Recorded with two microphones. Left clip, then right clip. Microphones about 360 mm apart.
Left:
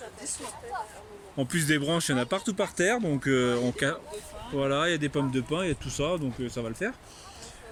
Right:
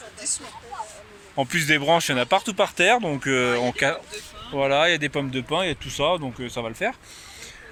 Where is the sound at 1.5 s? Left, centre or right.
Centre.